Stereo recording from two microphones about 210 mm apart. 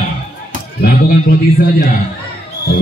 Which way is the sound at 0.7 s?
45° left (ahead or behind).